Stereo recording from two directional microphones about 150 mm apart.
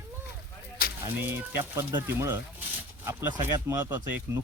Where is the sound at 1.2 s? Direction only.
15° right (ahead or behind).